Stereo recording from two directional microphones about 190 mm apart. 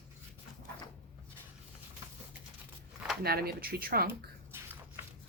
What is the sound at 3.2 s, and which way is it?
Speech, 55° right (ahead or behind).